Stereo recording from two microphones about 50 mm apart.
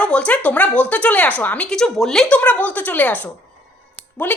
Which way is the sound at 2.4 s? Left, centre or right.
Left.